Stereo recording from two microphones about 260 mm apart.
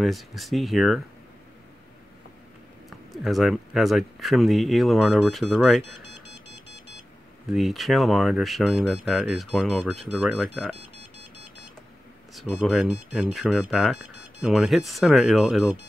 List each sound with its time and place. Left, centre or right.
0.0 s speech: centre
2.9 s speech: centre
7.4 s speech: centre
12.4 s speech: centre